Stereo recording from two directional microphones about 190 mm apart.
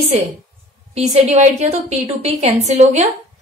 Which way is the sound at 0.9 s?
35° right (ahead or behind).